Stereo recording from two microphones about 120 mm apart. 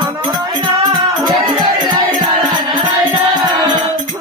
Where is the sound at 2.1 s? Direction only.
90° right.